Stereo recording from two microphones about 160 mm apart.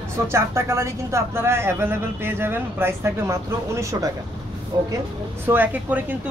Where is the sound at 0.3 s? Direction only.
15° right (ahead or behind).